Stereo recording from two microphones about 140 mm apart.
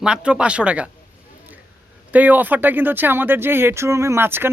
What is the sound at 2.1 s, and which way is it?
Speech, 10° right (ahead or behind).